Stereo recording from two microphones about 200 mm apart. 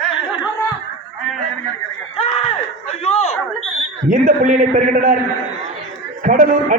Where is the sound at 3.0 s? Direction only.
30° left (ahead or behind).